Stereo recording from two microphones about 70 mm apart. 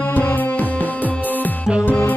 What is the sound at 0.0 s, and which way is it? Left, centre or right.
Music, left.